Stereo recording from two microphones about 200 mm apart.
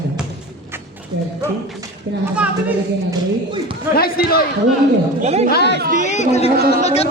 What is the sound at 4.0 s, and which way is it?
Speech, 50° left (ahead or behind).